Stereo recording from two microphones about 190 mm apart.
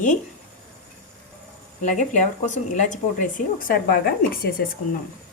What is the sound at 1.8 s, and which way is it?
Speech, 40° left (ahead or behind).